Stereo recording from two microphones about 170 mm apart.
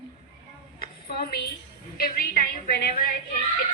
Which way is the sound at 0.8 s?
65° left (ahead or behind).